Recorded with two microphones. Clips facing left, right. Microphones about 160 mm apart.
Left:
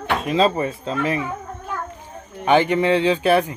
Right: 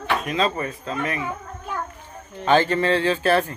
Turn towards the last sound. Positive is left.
turn(degrees=15)  # may be behind; listen again after turning